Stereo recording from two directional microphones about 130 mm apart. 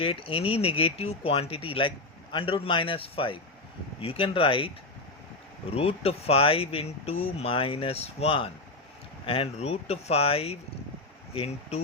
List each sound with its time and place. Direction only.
0.0 s speech: 45° left (ahead or behind)
5.7 s speech: 50° left (ahead or behind)